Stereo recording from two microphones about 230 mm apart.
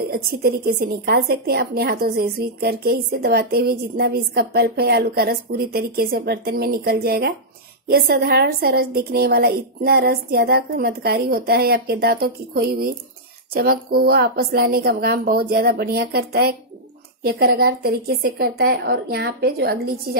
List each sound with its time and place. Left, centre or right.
0.1 s a woman's voice: right